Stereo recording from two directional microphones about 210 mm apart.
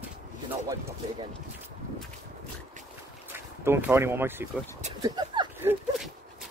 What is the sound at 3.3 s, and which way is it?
Speech, 10° right (ahead or behind).